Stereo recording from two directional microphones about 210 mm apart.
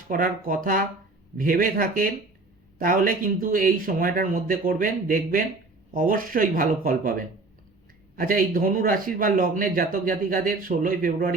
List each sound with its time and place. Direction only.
0.1 s a man's voice: 40° right (ahead or behind)